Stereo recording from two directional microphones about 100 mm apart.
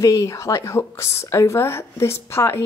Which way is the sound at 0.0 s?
30° left (ahead or behind).